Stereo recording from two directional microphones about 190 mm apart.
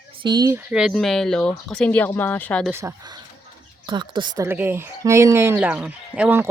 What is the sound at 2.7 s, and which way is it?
Speech, 15° right (ahead or behind).